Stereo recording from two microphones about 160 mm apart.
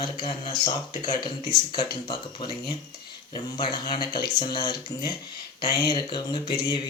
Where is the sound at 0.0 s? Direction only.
30° left (ahead or behind).